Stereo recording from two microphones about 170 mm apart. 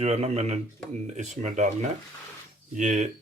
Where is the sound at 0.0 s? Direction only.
40° right (ahead or behind).